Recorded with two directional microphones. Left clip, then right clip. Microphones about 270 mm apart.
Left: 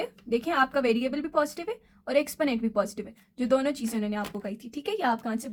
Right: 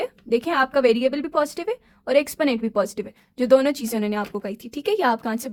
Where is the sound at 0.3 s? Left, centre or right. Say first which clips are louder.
Right 4 dB; right.